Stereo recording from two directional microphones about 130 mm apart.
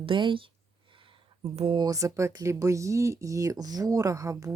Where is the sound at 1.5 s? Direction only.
55° right (ahead or behind).